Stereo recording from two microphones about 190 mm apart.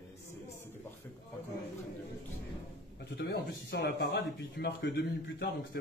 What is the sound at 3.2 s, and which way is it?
Speech, 60° left (ahead or behind).